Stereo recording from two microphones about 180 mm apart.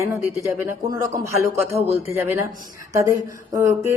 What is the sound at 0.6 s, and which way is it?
A woman's voice, 20° right (ahead or behind).